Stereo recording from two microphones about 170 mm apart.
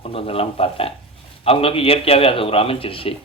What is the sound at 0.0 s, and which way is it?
Speech, 35° left (ahead or behind).